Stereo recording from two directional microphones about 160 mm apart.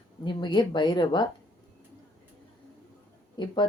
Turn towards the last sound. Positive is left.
turn(degrees=30)  # may be behind; listen again after turning